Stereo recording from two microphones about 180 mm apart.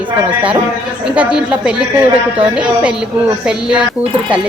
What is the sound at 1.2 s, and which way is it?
Speech, 5° right (ahead or behind).